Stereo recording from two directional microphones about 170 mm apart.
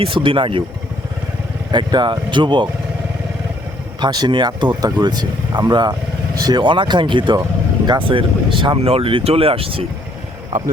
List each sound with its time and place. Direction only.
0.0 s speech: 30° right (ahead or behind)
1.7 s speech: 25° right (ahead or behind)
4.0 s speech: 25° right (ahead or behind)